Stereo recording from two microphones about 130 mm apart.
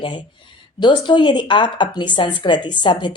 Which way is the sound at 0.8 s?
35° left (ahead or behind).